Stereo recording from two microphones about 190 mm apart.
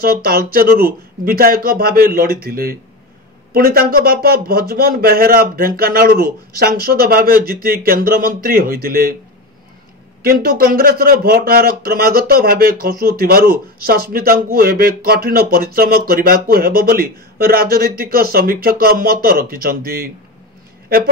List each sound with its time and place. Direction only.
0.0 s speech: 50° right (ahead or behind)
10.2 s speech: 50° right (ahead or behind)